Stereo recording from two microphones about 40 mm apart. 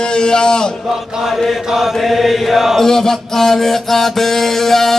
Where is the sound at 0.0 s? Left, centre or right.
Centre.